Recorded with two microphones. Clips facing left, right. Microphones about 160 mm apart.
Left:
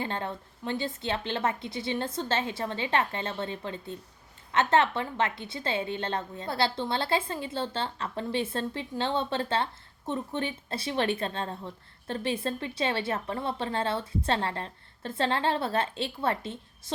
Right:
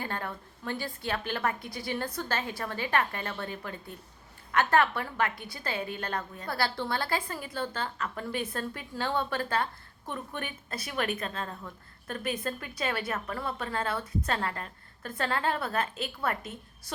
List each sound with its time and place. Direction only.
0.0 s a woman's voice: 25° left (ahead or behind)